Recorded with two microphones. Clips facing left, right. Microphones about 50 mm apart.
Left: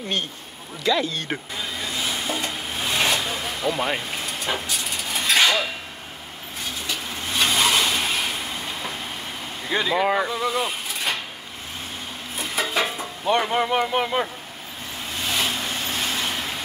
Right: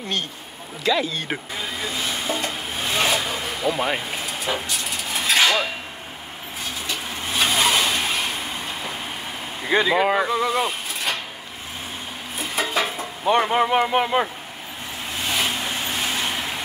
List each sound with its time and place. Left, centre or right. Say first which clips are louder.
0.8 s vehicle: right 1 dB; centre
6.9 s vehicle: right 1 dB; centre
9.8 s speech: right 2 dB; centre
12.4 s music: right 1 dB; centre
13.3 s speech: right 3 dB; right
15.1 s vehicle: right 1 dB; centre